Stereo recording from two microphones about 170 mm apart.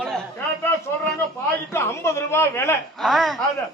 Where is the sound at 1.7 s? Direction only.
15° left (ahead or behind).